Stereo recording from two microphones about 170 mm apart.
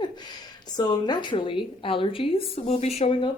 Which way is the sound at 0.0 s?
25° left (ahead or behind).